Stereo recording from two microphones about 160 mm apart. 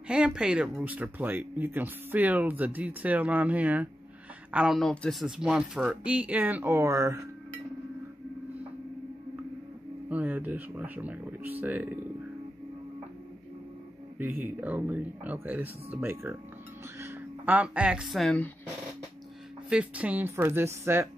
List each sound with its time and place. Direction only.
0.1 s speech: 5° right (ahead or behind)
10.0 s speech: 10° right (ahead or behind)
14.1 s speech: 10° right (ahead or behind); by 18.5 s 5° left (ahead or behind)
19.7 s speech: 10° right (ahead or behind)